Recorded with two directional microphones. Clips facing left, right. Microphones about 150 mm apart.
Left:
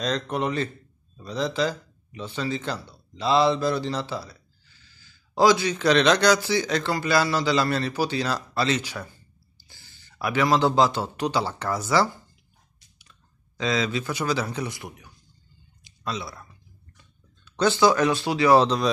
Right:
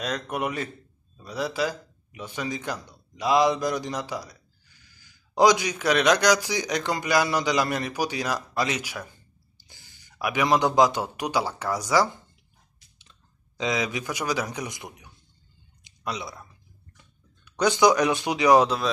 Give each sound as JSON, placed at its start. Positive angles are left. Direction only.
{"t": 0.0, "sound": "a man's voice", "side_deg": -10}
{"t": 13.6, "sound": "a man's voice", "side_deg": -15}
{"t": 15.8, "sound": "a sound", "side_deg": -20}
{"t": 17.5, "sound": "a man's voice", "side_deg": -15}